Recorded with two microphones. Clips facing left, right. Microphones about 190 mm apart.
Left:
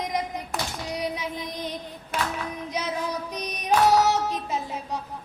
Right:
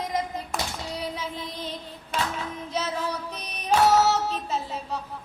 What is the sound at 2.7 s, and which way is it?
Child singing, 15° left (ahead or behind).